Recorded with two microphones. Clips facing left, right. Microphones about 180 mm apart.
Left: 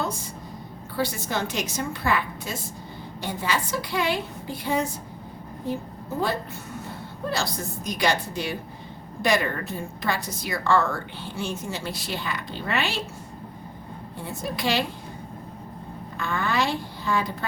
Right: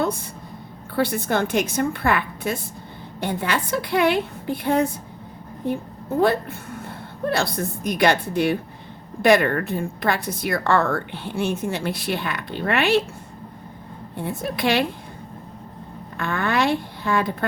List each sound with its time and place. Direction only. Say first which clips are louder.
0.9 s a woman's voice: right 6 dB; 60° right (ahead or behind)
14.2 s a woman's voice: right 5 dB; 60° right (ahead or behind)
16.1 s a woman's voice: right 3 dB; 60° right (ahead or behind)